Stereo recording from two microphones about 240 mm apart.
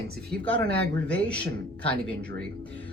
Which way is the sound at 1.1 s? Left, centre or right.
Centre.